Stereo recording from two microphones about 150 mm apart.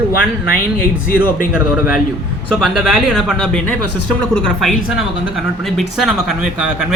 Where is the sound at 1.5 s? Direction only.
10° right (ahead or behind).